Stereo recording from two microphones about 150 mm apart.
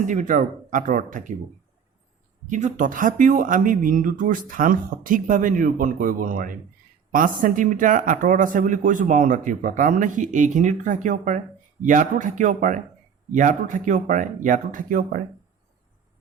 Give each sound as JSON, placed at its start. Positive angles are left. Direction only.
{"t": 0.1, "sound": "speech", "side_deg": -60}
{"t": 2.5, "sound": "speech", "side_deg": -55}